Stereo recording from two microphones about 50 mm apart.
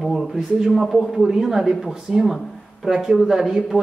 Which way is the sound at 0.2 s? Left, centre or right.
Centre.